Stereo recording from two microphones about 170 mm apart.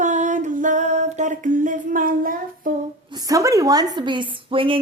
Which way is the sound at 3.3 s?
20° right (ahead or behind).